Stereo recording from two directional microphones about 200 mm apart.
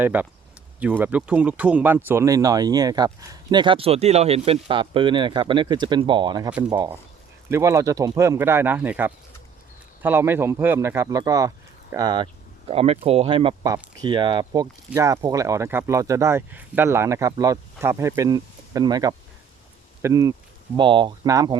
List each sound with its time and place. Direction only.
0.0 s speech: 10° right (ahead or behind)